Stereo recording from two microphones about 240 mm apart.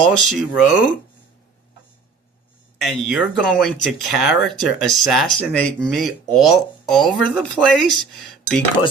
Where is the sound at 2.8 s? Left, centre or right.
Centre.